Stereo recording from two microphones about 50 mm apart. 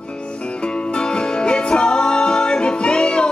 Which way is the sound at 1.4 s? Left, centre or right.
Centre.